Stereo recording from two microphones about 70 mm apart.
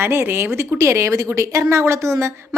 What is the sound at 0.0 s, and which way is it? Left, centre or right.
A woman's voice, right.